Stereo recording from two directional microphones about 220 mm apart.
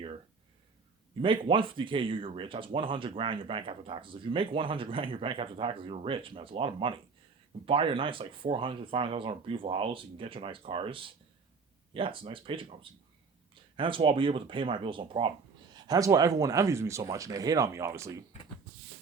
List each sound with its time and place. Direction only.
1.2 s speech: 25° right (ahead or behind)